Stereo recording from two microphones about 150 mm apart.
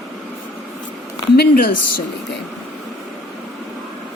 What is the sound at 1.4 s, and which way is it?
Speech, 85° left.